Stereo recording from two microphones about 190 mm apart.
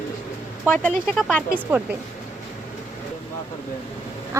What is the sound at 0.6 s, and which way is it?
Speech, 10° left (ahead or behind).